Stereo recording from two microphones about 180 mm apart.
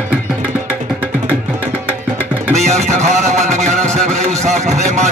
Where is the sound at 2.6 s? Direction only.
40° right (ahead or behind).